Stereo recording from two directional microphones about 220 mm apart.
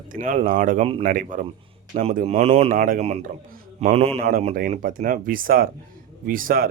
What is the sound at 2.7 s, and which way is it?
Speech, 40° right (ahead or behind).